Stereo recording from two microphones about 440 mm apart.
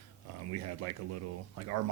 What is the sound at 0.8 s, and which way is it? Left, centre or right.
Speech, right.